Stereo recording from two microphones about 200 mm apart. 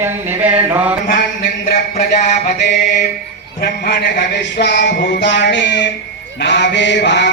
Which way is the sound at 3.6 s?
50° left (ahead or behind).